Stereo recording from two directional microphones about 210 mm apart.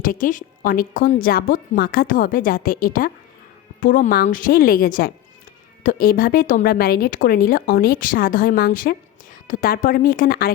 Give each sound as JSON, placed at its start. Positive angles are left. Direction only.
{"t": 0.0, "sound": "a woman's voice", "side_deg": 40}